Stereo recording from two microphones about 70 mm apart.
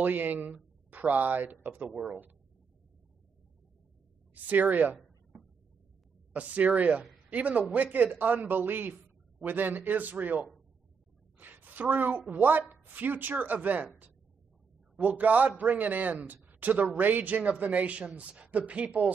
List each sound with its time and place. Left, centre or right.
0.0 s a man's voice: right
4.3 s a man's voice: right
6.3 s a man's voice: right
11.3 s a sound: right
12.3 s a man's voice: right
15.0 s a man's voice: right